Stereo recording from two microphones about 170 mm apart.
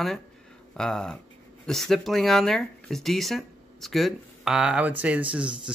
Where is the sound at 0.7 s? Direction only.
5° left (ahead or behind).